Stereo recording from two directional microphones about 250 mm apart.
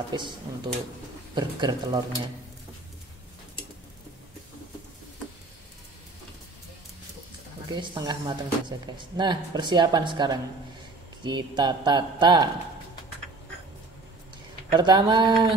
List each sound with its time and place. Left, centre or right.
1.3 s speech: centre
7.7 s speech: centre
14.7 s speech: centre